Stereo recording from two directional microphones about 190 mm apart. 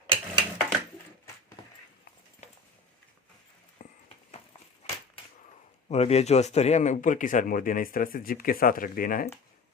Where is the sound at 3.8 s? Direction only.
40° left (ahead or behind).